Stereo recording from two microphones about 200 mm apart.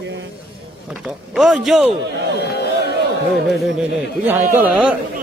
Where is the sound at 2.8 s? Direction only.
55° right (ahead or behind).